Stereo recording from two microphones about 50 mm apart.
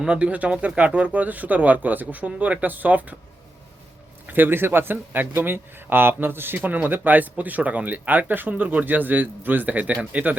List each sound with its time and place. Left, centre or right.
0.1 s speech: right
4.3 s speech: right
6.6 s speech: right